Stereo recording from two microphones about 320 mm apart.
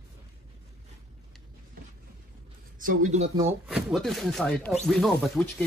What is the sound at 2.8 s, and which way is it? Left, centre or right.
Speech, right.